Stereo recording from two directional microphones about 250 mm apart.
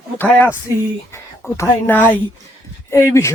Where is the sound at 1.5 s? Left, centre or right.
Centre.